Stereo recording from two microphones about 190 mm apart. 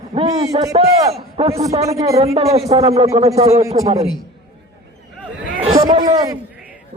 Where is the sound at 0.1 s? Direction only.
40° right (ahead or behind).